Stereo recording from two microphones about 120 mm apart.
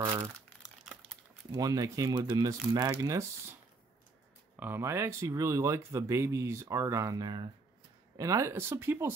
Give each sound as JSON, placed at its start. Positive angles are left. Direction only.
{"t": 1.5, "sound": "speech", "side_deg": -30}
{"t": 4.6, "sound": "speech", "side_deg": -20}